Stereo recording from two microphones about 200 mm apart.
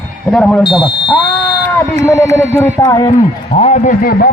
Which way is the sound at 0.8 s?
55° left (ahead or behind).